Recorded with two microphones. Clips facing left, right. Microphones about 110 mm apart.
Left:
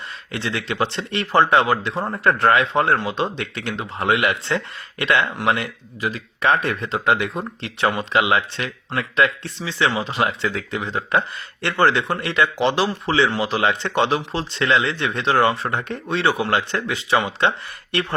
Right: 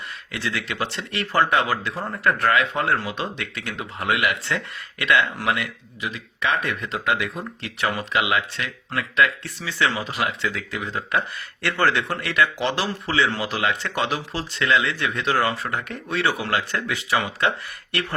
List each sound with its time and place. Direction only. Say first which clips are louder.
0.3 s speech: left 3 dB; 30° left (ahead or behind)